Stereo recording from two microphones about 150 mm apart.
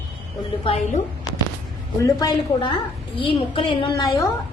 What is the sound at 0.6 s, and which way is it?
Speech, 45° left (ahead or behind).